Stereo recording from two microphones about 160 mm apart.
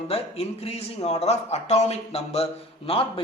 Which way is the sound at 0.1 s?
40° left (ahead or behind).